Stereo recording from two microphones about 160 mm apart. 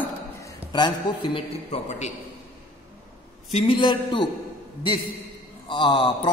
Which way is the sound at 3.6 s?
30° left (ahead or behind).